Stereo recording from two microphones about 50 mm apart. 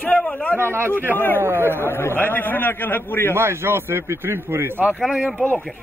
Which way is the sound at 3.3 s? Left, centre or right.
Right.